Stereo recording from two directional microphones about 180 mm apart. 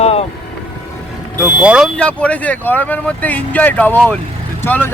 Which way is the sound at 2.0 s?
5° left (ahead or behind).